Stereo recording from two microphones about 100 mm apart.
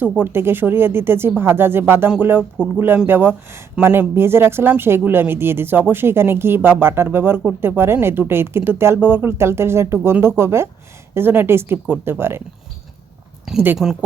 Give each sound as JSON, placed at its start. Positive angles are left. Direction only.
{"t": 0.0, "sound": "speech", "side_deg": -20}
{"t": 13.8, "sound": "speech", "side_deg": 0}